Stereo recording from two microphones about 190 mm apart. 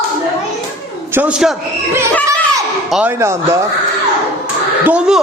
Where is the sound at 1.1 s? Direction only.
5° right (ahead or behind).